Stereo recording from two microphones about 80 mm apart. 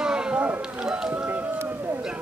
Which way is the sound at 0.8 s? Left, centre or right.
Centre.